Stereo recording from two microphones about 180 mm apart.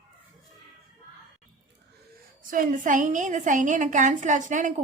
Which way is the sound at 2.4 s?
50° right (ahead or behind).